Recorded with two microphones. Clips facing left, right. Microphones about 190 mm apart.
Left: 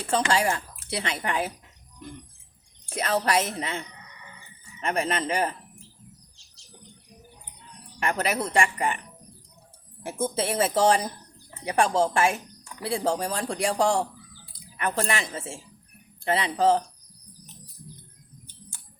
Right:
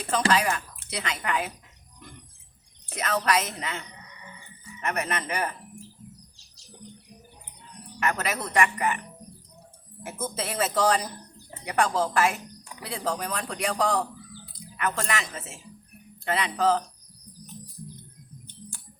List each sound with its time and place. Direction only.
0.3 s speech: 30° left (ahead or behind)
2.8 s speech: 30° left (ahead or behind)
7.9 s speech: 25° left (ahead or behind)
10.0 s speech: 30° left (ahead or behind)